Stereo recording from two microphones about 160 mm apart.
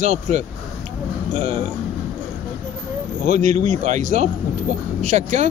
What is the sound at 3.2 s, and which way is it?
Speech, 50° right (ahead or behind).